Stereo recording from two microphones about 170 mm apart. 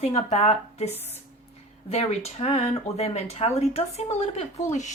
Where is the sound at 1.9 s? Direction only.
40° left (ahead or behind).